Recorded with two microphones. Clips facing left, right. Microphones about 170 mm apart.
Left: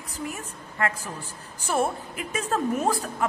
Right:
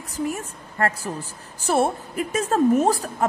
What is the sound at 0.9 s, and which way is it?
Speech, 90° right.